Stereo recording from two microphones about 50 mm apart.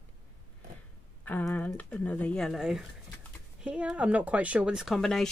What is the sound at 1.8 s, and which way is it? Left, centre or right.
Speech, left.